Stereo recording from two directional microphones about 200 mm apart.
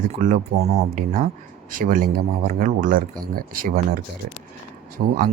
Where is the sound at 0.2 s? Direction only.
35° right (ahead or behind).